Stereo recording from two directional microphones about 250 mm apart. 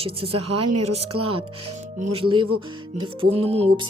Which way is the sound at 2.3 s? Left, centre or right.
Centre.